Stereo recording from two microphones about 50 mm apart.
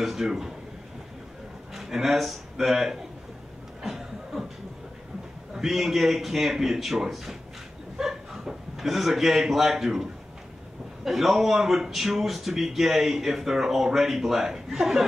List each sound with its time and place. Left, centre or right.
0.0 s speech: centre
1.7 s a man's voice: centre
3.8 s a sound: centre
5.5 s a man's voice: centre
11.1 s speech: centre